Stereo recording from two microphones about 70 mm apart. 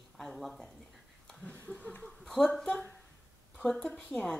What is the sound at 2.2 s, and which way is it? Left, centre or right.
A woman's voice, centre.